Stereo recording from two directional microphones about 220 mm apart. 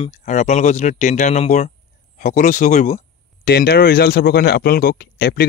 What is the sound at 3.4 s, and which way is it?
Speech, 45° left (ahead or behind).